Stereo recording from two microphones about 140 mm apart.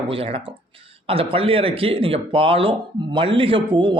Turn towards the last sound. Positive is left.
turn(degrees=-35)  # may be behind; listen again after turning